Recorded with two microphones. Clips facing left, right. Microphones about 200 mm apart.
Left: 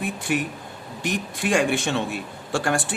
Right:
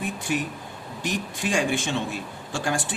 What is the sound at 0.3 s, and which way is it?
Speech, 60° left (ahead or behind).